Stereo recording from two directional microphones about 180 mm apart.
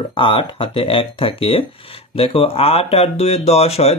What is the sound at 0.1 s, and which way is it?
Speech, 30° left (ahead or behind).